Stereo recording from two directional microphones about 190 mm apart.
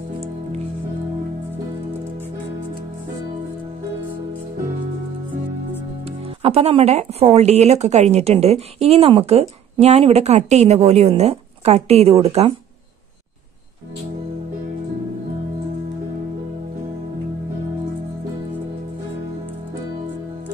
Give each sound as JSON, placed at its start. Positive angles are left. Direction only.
{"t": 6.0, "sound": "speech", "side_deg": -30}